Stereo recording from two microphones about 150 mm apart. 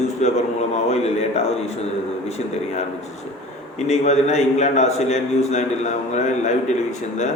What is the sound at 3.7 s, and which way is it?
A man's voice, 50° left (ahead or behind).